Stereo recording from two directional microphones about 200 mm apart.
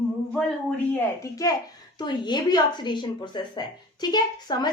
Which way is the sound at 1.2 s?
15° left (ahead or behind).